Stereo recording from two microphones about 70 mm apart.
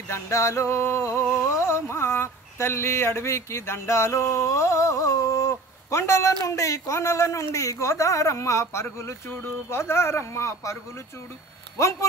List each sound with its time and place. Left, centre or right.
0.1 s a man's voice: left
1.4 s a sound: left
6.4 s a man's voice: left
8.8 s speech: left